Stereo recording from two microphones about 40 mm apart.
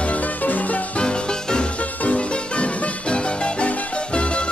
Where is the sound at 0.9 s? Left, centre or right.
Left.